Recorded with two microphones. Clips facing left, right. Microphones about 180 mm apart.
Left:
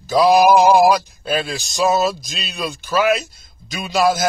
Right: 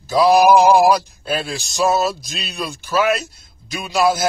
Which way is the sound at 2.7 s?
Centre (ahead or behind).